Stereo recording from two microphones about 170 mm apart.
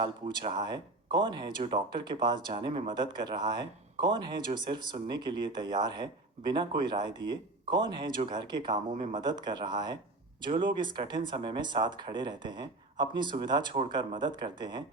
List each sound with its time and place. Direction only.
0.3 s speech: 25° right (ahead or behind)